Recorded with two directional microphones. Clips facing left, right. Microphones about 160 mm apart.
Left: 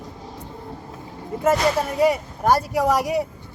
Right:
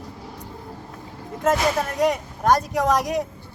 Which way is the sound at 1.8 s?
5° left (ahead or behind).